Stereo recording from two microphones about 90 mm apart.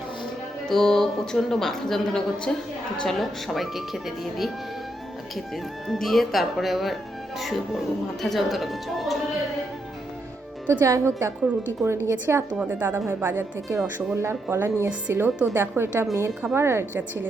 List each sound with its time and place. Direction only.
0.7 s speech: 5° left (ahead or behind)
5.9 s speech: centre (ahead or behind)
10.7 s a woman's voice: 30° right (ahead or behind)